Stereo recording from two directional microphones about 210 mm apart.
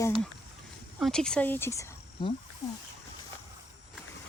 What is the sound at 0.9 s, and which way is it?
Speech, centre (ahead or behind).